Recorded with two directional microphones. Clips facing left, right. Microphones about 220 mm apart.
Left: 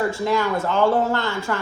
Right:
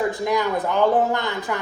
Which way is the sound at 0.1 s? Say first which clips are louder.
Even; 15° right (ahead or behind).